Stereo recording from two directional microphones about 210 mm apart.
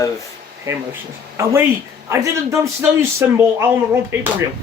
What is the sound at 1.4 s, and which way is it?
A man's voice, 10° right (ahead or behind).